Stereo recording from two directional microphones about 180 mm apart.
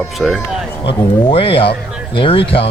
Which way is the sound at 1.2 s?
30° left (ahead or behind).